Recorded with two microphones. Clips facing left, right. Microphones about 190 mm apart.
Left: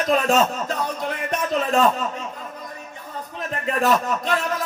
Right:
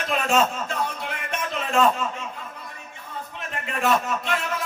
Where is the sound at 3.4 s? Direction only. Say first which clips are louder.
Left 6 dB; 35° left (ahead or behind).